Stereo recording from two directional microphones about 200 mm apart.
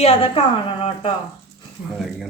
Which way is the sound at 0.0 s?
30° left (ahead or behind).